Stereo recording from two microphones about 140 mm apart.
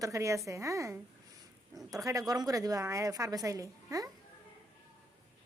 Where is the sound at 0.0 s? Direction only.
20° right (ahead or behind).